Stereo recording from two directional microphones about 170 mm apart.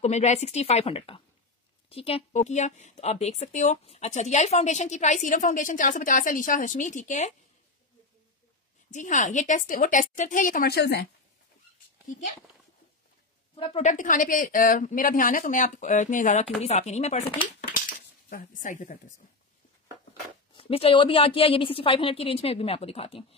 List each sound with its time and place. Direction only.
0.0 s a woman's voice: 40° left (ahead or behind)
8.9 s a woman's voice: 45° left (ahead or behind); by 11.1 s 75° left (ahead or behind)
13.6 s a woman's voice: 30° left (ahead or behind)
13.8 s a woman's voice: 50° left (ahead or behind)
20.5 s a woman's voice: 30° left (ahead or behind)